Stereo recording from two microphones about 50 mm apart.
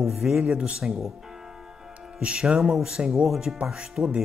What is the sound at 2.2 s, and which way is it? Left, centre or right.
Speech, right.